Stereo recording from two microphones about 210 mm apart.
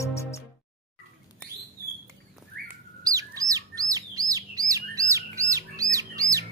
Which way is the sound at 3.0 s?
15° right (ahead or behind).